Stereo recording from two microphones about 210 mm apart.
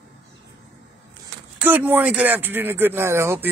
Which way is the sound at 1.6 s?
10° right (ahead or behind).